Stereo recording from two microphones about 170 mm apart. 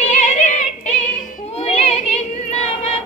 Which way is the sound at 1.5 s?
40° left (ahead or behind).